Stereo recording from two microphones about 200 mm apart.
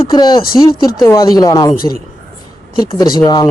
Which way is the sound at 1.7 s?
45° left (ahead or behind).